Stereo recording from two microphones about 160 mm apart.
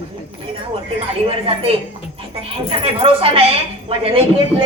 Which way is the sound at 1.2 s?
35° right (ahead or behind).